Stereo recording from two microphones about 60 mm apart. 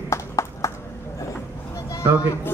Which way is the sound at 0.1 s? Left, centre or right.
Left.